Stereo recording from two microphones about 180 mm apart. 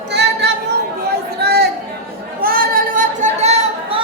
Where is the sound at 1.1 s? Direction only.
65° right (ahead or behind).